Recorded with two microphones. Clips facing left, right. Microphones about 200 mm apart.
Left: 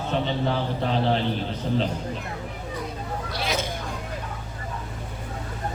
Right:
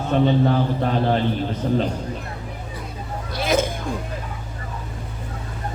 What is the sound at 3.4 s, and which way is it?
Hubbub, 50° right (ahead or behind).